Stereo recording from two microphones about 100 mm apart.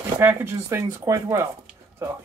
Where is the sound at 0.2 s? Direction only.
20° right (ahead or behind).